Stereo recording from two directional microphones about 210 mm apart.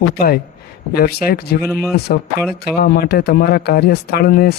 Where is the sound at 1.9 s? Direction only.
45° left (ahead or behind).